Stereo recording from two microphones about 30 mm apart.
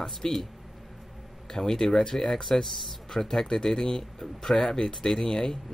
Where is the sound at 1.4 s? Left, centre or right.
Centre.